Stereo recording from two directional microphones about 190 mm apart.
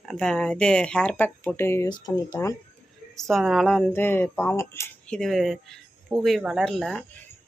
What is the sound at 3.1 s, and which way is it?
Speech, centre (ahead or behind).